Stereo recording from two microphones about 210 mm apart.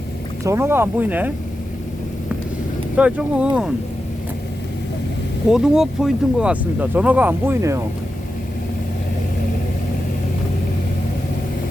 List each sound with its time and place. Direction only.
0.4 s speech: 10° right (ahead or behind)
2.9 s speech: 5° right (ahead or behind)
5.5 s speech: 5° right (ahead or behind)